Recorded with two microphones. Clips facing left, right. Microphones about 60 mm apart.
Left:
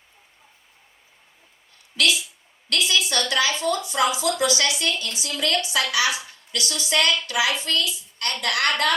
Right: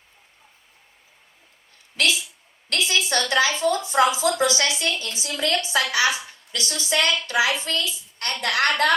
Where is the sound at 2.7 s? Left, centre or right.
Right.